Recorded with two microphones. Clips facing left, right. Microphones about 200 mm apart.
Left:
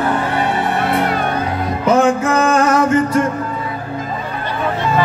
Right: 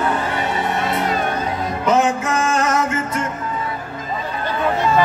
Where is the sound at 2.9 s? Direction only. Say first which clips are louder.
Left 9 dB; 35° left (ahead or behind).